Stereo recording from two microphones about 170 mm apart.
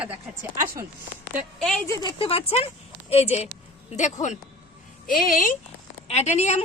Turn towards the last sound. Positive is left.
turn(degrees=40)  # may be behind; listen again after turning